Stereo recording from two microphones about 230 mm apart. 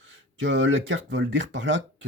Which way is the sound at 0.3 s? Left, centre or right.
Right.